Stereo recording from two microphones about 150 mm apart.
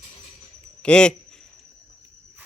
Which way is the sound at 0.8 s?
5° left (ahead or behind).